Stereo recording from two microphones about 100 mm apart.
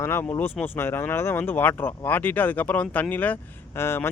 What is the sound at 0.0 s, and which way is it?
Speech, 25° left (ahead or behind).